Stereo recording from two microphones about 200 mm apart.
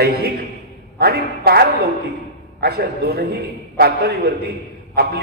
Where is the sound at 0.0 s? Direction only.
50° right (ahead or behind).